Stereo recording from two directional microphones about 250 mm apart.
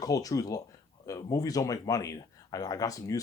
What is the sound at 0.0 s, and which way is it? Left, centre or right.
Speech, centre.